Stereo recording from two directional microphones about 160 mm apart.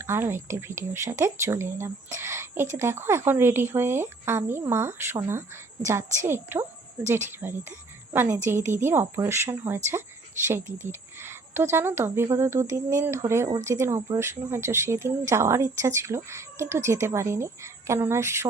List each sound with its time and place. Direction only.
0.0 s speech: 15° right (ahead or behind)